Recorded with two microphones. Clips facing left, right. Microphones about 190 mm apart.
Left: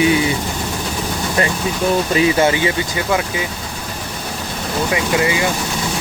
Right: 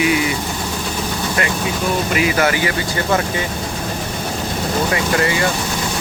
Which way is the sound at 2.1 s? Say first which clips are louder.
Left 2 dB; 30° left (ahead or behind).